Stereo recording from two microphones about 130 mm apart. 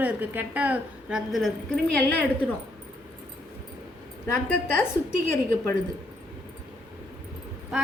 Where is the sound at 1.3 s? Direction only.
Centre (ahead or behind).